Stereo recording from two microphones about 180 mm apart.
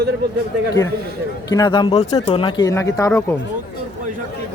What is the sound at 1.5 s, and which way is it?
A man's voice, 20° left (ahead or behind).